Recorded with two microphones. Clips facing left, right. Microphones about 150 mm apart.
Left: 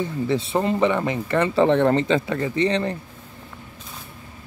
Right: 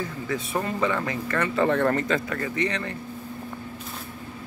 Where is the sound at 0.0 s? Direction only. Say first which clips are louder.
Left 6 dB; 25° left (ahead or behind).